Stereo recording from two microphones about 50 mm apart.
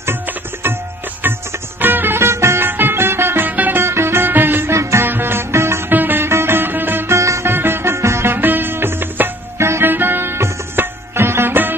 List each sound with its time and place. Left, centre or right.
1.2 s music: right
2.1 s music: right
3.4 s music: right
3.8 s music: right
5.9 s music: right
6.2 s music: right
7.1 s music: right
7.4 s music: right
8.4 s music: right